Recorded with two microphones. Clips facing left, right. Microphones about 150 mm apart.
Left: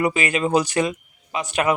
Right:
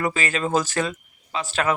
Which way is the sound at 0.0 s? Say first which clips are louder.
Left 3 dB; 15° left (ahead or behind).